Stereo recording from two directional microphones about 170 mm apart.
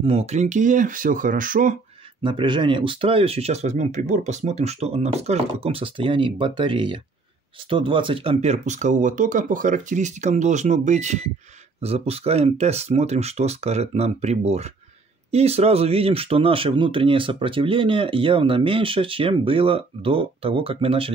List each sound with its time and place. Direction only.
0.0 s speech: 35° right (ahead or behind); by 1.8 s 50° right (ahead or behind)
2.2 s speech: 30° right (ahead or behind)